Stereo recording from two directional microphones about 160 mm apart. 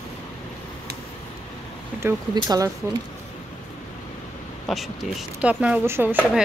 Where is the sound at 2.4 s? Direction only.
25° right (ahead or behind).